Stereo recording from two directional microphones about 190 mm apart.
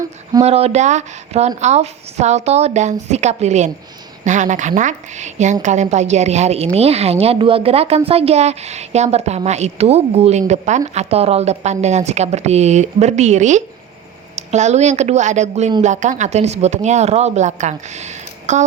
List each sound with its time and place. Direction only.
0.4 s a woman's voice: 35° right (ahead or behind)